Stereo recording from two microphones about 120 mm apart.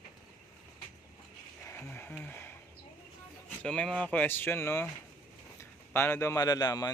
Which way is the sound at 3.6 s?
5° left (ahead or behind).